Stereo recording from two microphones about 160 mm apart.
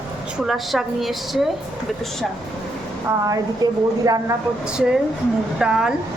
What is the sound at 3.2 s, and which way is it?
A woman's voice, 20° right (ahead or behind).